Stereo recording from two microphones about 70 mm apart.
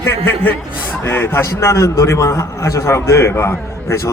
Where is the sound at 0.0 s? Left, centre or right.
Left.